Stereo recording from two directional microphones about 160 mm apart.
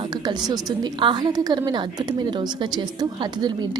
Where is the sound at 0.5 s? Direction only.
25° right (ahead or behind).